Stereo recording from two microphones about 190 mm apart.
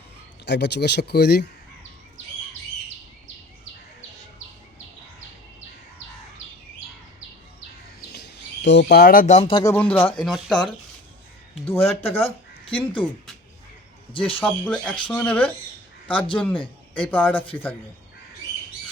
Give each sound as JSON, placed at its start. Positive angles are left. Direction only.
{"t": 0.4, "sound": "speech", "side_deg": 65}
{"t": 8.6, "sound": "speech", "side_deg": 70}
{"t": 9.5, "sound": "speech", "side_deg": 20}
{"t": 9.7, "sound": "speech", "side_deg": 10}
{"t": 11.9, "sound": "speech", "side_deg": 30}
{"t": 14.1, "sound": "speech", "side_deg": 30}
{"t": 14.4, "sound": "speech", "side_deg": 5}
{"t": 16.0, "sound": "speech", "side_deg": 25}
{"t": 17.1, "sound": "speech", "side_deg": 10}